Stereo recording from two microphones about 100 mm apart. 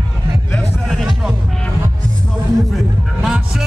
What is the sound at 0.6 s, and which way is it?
Music, centre (ahead or behind).